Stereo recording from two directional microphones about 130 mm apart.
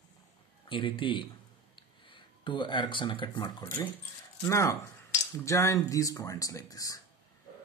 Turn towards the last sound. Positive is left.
turn(degrees=25)  # may be behind; listen again after turning